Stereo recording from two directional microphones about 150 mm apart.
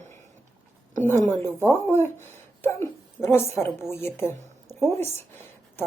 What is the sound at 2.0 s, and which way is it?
A woman's voice, 15° left (ahead or behind).